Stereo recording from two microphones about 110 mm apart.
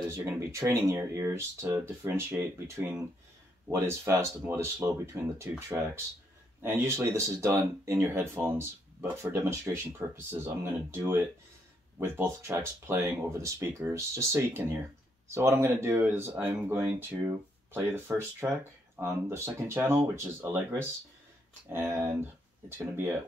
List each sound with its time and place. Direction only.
0.1 s speech: 25° right (ahead or behind)
3.6 s speech: 20° right (ahead or behind)
6.6 s speech: 20° right (ahead or behind)